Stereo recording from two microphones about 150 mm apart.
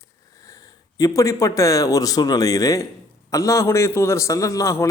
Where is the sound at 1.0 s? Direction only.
20° left (ahead or behind).